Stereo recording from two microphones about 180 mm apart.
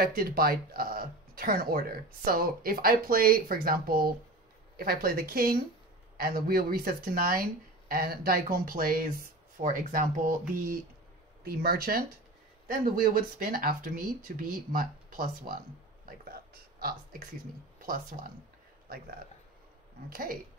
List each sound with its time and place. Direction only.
0.0 s speech: 55° right (ahead or behind)
16.8 s speech: 55° right (ahead or behind)
20.1 s speech: 55° right (ahead or behind)